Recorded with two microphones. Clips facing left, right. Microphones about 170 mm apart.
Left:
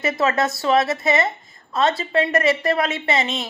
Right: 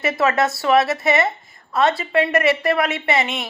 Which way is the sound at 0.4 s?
20° left (ahead or behind).